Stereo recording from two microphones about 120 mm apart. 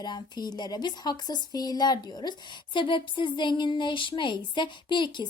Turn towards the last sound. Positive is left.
turn(degrees=40)  # may be behind; listen again after turning